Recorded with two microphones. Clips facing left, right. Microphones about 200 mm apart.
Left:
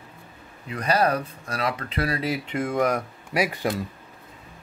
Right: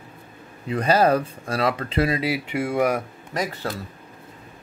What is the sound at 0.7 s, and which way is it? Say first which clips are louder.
Speech: right 4 dB; 25° right (ahead or behind).